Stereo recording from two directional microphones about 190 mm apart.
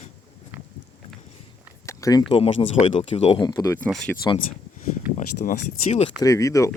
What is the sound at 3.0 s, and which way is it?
Speech, 35° left (ahead or behind).